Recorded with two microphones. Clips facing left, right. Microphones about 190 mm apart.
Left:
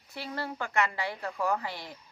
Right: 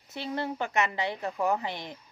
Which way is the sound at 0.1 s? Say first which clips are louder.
Right 4 dB; 20° right (ahead or behind).